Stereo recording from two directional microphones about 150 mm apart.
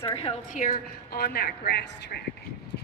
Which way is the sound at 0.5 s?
60° left (ahead or behind).